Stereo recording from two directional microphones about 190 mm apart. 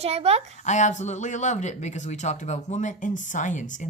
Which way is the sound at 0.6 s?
40° left (ahead or behind).